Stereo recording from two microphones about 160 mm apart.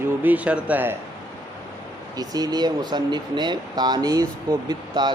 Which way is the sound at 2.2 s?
25° right (ahead or behind).